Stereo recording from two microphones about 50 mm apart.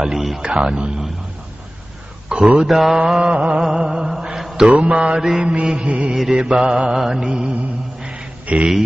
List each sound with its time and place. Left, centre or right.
0.0 s a man's voice: centre
0.4 s mantra: centre
2.2 s mantra: centre
2.7 s mantra: centre
3.3 s mantra: centre
6.1 s mantra: centre
6.5 s mantra: right
8.1 s a sound: right